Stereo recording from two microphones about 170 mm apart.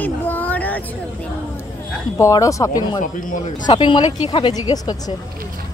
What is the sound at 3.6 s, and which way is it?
Speech, 30° left (ahead or behind).